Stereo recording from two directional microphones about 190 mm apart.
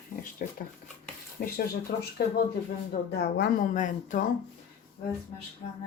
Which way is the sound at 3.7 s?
40° left (ahead or behind).